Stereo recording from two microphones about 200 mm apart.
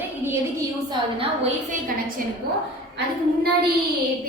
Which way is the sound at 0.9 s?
30° right (ahead or behind).